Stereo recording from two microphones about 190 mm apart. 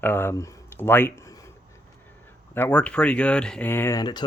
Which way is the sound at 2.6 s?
10° left (ahead or behind).